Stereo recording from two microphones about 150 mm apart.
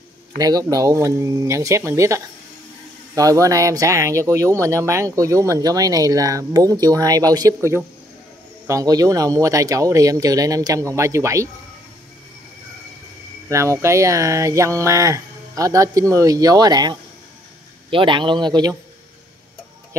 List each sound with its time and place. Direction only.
0.4 s speech: 25° right (ahead or behind)
13.5 s a man's voice: 20° right (ahead or behind)